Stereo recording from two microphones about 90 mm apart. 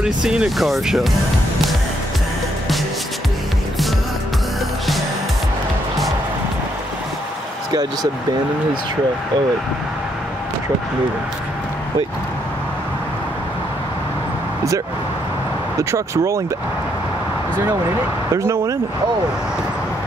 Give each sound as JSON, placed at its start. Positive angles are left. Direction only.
{"t": 0.0, "sound": "speech", "side_deg": -10}
{"t": 7.7, "sound": "speech", "side_deg": -45}
{"t": 15.8, "sound": "speech", "side_deg": -35}
{"t": 18.3, "sound": "speech", "side_deg": -35}